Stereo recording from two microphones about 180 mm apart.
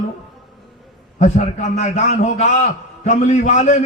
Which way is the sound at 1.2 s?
40° left (ahead or behind).